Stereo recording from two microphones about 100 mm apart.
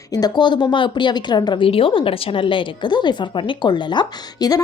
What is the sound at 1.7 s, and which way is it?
A woman's voice, 65° left (ahead or behind).